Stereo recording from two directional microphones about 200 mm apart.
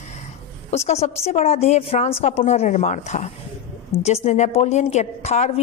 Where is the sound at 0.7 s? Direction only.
35° left (ahead or behind).